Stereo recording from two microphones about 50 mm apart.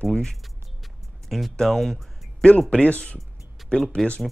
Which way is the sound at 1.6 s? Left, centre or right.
Centre.